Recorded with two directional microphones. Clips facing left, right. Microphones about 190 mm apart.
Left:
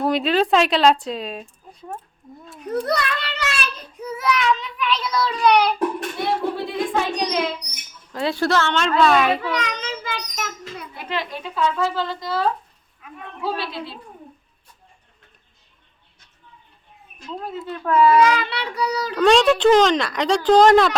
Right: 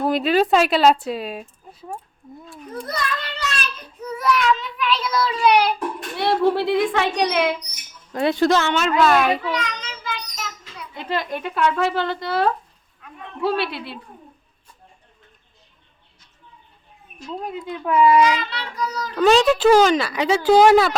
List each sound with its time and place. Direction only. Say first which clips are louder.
0.0 s a woman's voice: right 1 dB; centre (ahead or behind)
2.8 s child singing: left 4 dB; 70° left (ahead or behind)
4.0 s a woman's voice: right 1 dB; 5° left (ahead or behind)
6.1 s speech: right 7 dB; 75° right (ahead or behind)
8.1 s a woman's voice: right 3 dB; 20° right (ahead or behind); by 9.4 s centre (ahead or behind)
9.5 s children playing: left 1 dB; 60° left (ahead or behind)
11.1 s speech: right 3 dB; 50° right (ahead or behind)
13.0 s a man's voice: left 2 dB; 5° left (ahead or behind)
13.4 s speech: right 4 dB; 65° right (ahead or behind)
17.2 s a woman's voice: right 1 dB; 15° right (ahead or behind)
18.3 s child singing: left 3 dB; 65° left (ahead or behind)
19.2 s a woman's voice: even; 5° right (ahead or behind)